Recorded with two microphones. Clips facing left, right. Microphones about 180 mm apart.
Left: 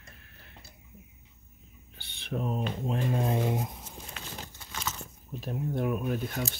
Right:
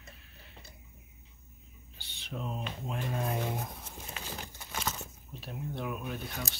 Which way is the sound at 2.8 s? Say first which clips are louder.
Left 5 dB; 30° left (ahead or behind).